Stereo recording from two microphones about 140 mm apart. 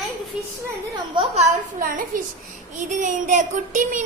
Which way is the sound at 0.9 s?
35° right (ahead or behind).